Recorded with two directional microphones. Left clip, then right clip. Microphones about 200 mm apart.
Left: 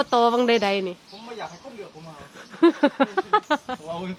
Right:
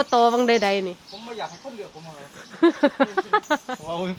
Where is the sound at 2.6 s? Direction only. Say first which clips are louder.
Even; 5° left (ahead or behind).